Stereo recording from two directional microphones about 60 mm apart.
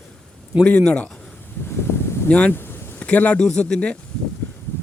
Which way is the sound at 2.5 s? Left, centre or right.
Left.